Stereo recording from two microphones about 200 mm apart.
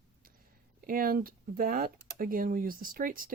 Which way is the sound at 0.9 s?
45° right (ahead or behind).